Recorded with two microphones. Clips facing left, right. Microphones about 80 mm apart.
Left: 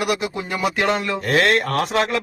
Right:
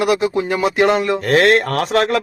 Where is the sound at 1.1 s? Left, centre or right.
Right.